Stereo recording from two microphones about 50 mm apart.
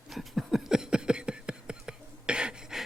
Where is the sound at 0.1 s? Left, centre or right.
Centre.